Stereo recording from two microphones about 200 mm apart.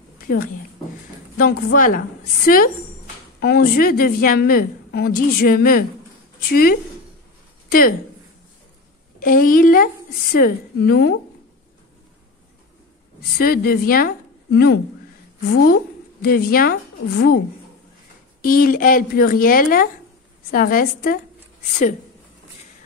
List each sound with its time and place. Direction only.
0.2 s a sound: 45° left (ahead or behind)
1.4 s a woman's voice: 45° left (ahead or behind)
9.2 s a woman's voice: 45° left (ahead or behind)
13.4 s a woman's voice: 50° left (ahead or behind)
18.4 s a woman's voice: 45° left (ahead or behind)